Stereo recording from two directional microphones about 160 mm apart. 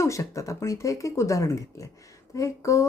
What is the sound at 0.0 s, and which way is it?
Speech, 20° left (ahead or behind).